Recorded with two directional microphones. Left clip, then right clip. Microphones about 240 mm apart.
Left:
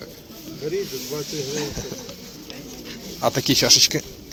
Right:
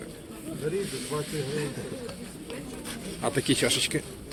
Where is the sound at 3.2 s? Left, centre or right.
Left.